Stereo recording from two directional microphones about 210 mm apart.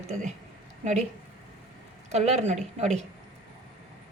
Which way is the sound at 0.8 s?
35° right (ahead or behind).